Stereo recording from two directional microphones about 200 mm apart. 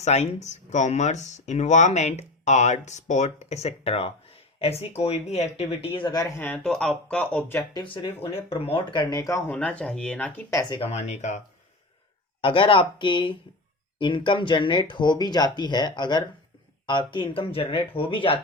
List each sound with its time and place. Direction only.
0.0 s speech: 35° left (ahead or behind); by 10.8 s 20° left (ahead or behind)
10.8 s speech: 35° left (ahead or behind)
12.4 s speech: 25° left (ahead or behind)